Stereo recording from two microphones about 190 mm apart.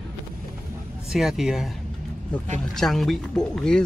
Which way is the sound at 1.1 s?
Centre (ahead or behind).